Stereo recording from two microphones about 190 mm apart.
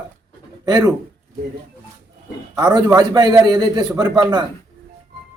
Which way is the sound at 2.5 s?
20° right (ahead or behind).